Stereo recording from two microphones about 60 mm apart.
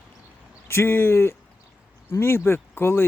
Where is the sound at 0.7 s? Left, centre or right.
Left.